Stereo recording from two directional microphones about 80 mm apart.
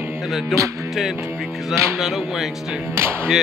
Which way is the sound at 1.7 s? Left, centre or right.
Centre.